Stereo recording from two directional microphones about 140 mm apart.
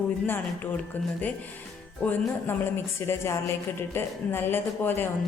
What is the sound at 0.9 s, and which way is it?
A woman's voice, 10° left (ahead or behind).